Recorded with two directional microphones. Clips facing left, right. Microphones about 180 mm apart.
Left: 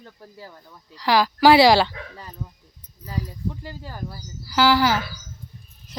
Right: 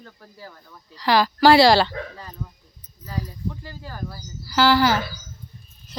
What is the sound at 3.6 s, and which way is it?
Speech, 20° left (ahead or behind).